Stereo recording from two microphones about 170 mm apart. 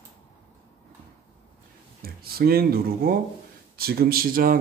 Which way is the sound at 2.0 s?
65° right (ahead or behind).